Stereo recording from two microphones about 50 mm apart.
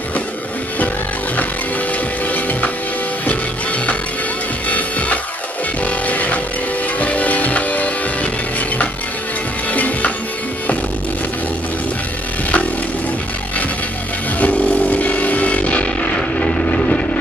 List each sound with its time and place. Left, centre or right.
2.2 s music: left
4.6 s music: left
14.4 s a sound: left